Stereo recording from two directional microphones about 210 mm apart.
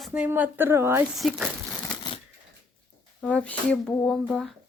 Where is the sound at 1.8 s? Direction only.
20° left (ahead or behind).